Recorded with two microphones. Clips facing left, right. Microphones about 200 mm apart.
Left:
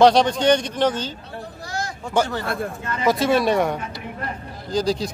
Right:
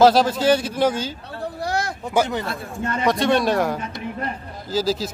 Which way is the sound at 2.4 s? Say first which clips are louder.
Left 4 dB; 55° left (ahead or behind).